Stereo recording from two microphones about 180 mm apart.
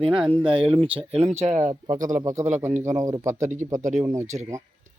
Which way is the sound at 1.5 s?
15° right (ahead or behind).